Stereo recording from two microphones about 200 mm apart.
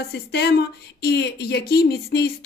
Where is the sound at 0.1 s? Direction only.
55° left (ahead or behind).